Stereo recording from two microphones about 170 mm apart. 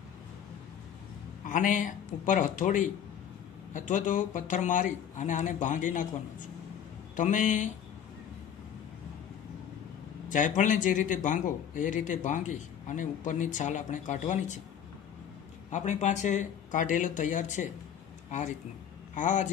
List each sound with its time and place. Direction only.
1.4 s speech: 50° left (ahead or behind)
7.2 s speech: 50° left (ahead or behind)
10.3 s speech: 50° left (ahead or behind)
15.7 s speech: 45° left (ahead or behind)
19.1 s speech: 45° left (ahead or behind)